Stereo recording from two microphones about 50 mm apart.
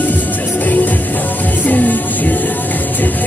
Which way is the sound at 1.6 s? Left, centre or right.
Left.